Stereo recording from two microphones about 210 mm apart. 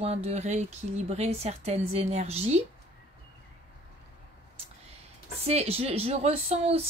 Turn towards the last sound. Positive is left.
turn(degrees=-30)  # may be behind; listen again after turning